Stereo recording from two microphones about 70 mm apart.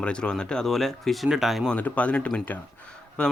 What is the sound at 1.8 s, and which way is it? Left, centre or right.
Speech, centre.